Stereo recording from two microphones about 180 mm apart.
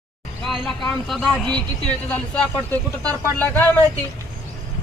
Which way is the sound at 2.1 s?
10° left (ahead or behind).